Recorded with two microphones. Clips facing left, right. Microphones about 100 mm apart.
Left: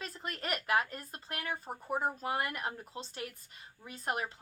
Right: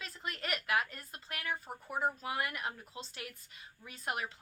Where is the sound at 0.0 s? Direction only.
40° left (ahead or behind).